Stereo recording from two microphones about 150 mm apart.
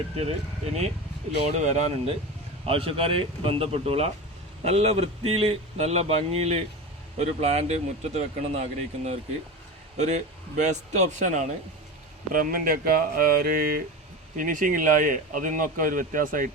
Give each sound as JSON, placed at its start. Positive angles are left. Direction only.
{"t": 0.2, "sound": "speech", "side_deg": -45}
{"t": 12.3, "sound": "speech", "side_deg": -70}
{"t": 14.3, "sound": "speech", "side_deg": -65}